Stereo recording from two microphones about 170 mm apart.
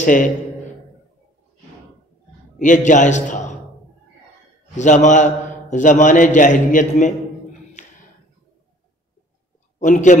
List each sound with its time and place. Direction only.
0.0 s a man's voice: 50° left (ahead or behind)
2.6 s a man's voice: 50° left (ahead or behind)
4.7 s a man's voice: 45° left (ahead or behind)
7.8 s a sound: 45° left (ahead or behind)
9.8 s a man's voice: 45° left (ahead or behind)